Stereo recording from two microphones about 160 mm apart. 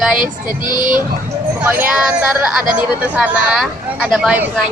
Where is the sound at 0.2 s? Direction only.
60° right (ahead or behind).